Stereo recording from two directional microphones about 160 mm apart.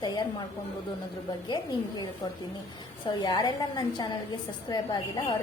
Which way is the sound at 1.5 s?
25° left (ahead or behind).